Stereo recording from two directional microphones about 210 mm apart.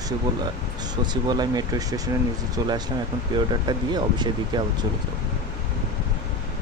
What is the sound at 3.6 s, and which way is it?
Speech, 20° right (ahead or behind).